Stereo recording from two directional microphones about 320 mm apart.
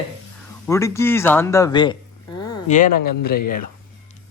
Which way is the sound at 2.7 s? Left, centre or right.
Left.